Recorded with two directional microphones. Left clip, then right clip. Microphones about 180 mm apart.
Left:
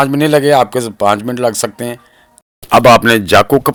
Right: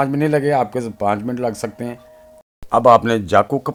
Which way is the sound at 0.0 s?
25° left (ahead or behind).